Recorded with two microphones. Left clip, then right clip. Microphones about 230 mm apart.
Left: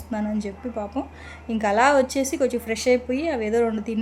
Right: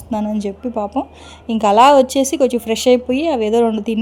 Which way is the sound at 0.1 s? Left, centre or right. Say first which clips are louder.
Right 7 dB; right.